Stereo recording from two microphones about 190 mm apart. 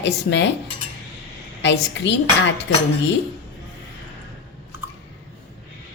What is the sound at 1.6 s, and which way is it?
Speech, 70° left (ahead or behind).